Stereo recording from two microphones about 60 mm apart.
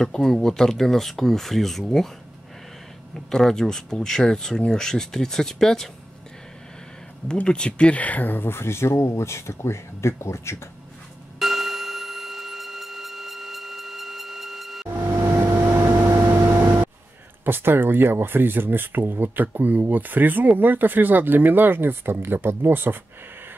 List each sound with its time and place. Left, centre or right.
0.0 s speech: centre
3.3 s speech: centre
7.3 s speech: centre; by 10.6 s left
11.3 s clock: centre
14.9 s vehicle: right
16.2 s a sound: right
17.5 s speech: right